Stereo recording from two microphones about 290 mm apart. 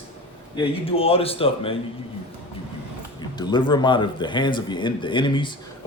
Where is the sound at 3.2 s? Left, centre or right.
Centre.